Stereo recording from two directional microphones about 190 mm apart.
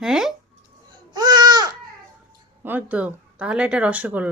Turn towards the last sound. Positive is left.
turn(degrees=-10)  # may be behind; listen again after turning